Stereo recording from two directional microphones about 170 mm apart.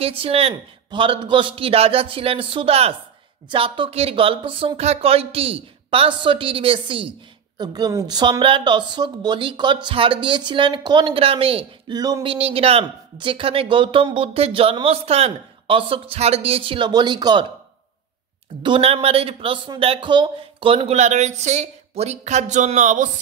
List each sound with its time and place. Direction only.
0.0 s a woman's voice: 35° right (ahead or behind)
18.6 s speech: 30° right (ahead or behind)